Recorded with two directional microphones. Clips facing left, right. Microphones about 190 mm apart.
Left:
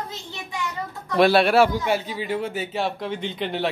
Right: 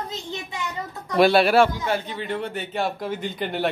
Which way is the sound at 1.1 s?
Centre (ahead or behind).